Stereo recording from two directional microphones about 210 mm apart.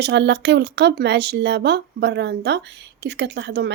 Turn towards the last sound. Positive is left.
turn(degrees=-55)  # may be behind; listen again after turning